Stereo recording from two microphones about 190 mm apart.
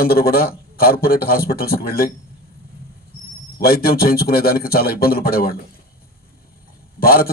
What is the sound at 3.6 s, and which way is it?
A man's voice, 50° left (ahead or behind).